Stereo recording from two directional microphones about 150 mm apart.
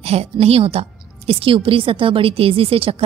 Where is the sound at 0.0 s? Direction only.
45° right (ahead or behind).